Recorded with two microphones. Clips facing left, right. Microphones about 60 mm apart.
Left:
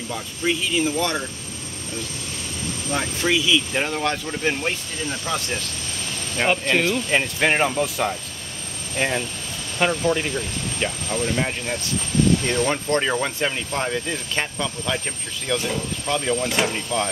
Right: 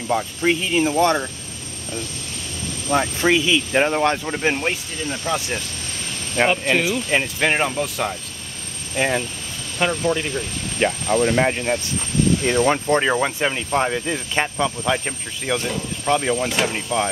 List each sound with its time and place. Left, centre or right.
0.1 s speech: right
3.0 s speech: right
6.6 s speech: centre
8.9 s speech: centre
9.8 s speech: centre
10.8 s speech: right
12.4 s speech: centre
16.4 s speech: centre